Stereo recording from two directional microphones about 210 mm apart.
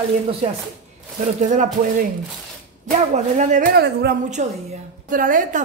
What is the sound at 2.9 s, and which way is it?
A woman's voice, 35° right (ahead or behind).